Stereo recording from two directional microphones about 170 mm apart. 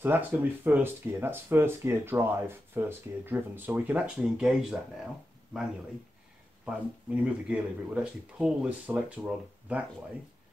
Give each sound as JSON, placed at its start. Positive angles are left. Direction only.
{"t": 0.0, "sound": "speech", "side_deg": -10}
{"t": 6.6, "sound": "speech", "side_deg": -5}